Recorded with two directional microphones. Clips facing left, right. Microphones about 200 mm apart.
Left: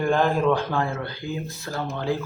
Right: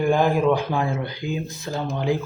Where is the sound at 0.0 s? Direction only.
10° right (ahead or behind).